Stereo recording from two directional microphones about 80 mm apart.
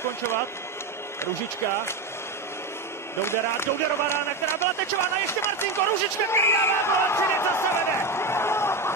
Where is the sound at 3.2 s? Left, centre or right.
Left.